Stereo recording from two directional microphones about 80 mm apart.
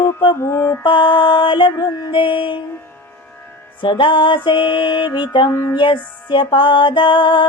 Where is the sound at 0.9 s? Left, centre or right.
Left.